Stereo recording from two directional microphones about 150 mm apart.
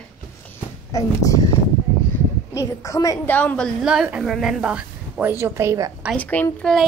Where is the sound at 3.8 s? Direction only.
5° right (ahead or behind).